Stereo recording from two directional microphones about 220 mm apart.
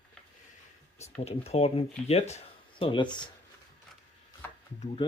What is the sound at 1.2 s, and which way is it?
Speech, 30° left (ahead or behind).